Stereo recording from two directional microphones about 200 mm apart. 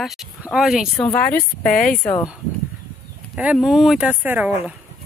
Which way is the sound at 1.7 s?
40° left (ahead or behind).